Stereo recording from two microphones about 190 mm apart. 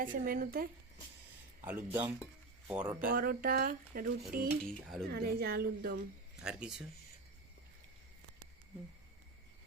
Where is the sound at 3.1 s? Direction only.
50° right (ahead or behind).